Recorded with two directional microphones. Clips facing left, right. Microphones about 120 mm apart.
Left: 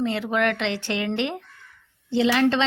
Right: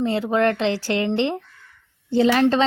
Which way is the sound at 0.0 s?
30° right (ahead or behind).